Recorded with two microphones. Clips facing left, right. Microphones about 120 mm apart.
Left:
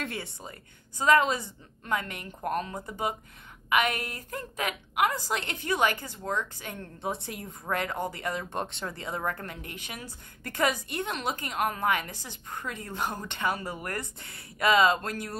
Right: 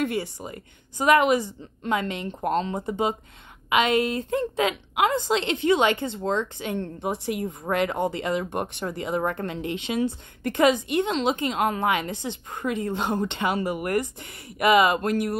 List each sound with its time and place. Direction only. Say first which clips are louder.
0.1 s speech: right 9 dB; 15° right (ahead or behind)